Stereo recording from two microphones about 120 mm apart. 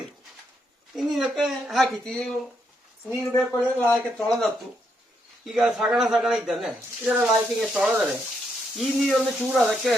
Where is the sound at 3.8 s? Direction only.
5° left (ahead or behind).